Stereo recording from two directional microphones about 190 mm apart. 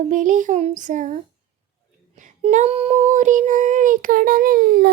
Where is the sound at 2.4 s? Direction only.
35° right (ahead or behind).